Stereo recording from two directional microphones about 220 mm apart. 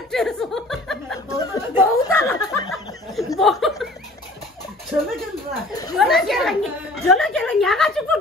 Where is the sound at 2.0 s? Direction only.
15° left (ahead or behind).